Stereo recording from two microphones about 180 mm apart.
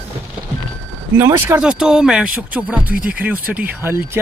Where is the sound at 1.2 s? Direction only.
15° right (ahead or behind).